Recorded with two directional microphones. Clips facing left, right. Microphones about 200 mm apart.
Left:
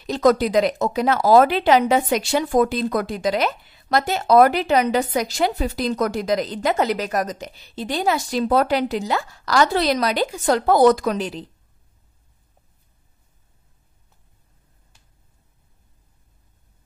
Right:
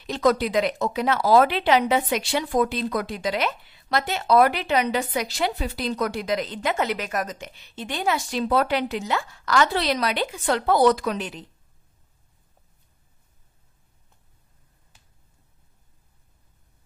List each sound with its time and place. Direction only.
0.0 s speech: 40° left (ahead or behind)